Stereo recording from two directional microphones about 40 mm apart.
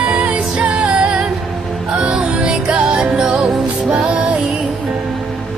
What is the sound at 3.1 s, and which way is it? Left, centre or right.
Music, centre.